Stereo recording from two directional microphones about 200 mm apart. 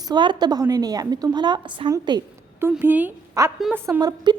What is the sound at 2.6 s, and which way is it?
A woman's voice, 10° right (ahead or behind).